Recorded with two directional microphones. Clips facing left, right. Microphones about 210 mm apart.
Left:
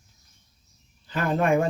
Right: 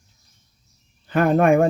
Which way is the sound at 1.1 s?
55° right (ahead or behind).